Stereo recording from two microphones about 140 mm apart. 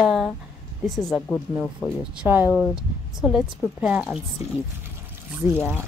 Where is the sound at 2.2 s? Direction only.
15° right (ahead or behind).